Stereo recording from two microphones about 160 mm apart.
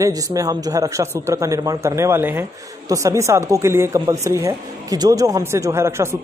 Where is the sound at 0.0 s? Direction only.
20° right (ahead or behind).